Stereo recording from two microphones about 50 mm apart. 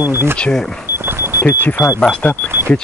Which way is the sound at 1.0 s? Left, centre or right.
Right.